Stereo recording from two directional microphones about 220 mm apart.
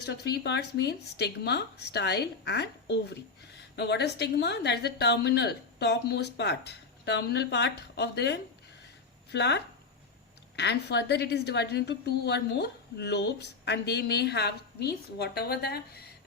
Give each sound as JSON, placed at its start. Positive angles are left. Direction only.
{"t": 0.0, "sound": "a woman's voice", "side_deg": 45}
{"t": 10.6, "sound": "a woman's voice", "side_deg": 50}